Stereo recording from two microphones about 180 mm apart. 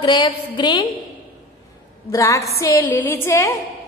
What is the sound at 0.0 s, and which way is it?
Speech, 25° left (ahead or behind).